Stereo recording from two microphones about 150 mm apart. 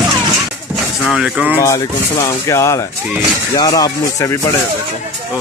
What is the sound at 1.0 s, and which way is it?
Speech, 5° right (ahead or behind).